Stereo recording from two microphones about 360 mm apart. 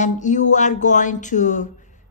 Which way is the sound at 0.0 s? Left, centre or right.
Centre.